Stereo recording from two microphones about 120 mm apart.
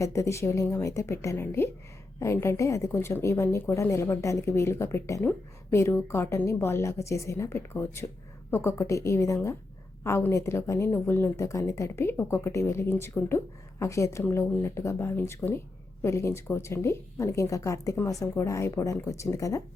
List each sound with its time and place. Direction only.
0.0 s a woman's voice: 25° left (ahead or behind)